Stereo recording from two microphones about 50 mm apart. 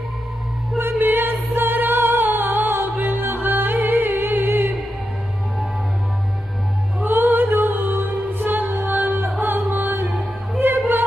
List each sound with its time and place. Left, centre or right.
0.7 s music: right
7.1 s music: right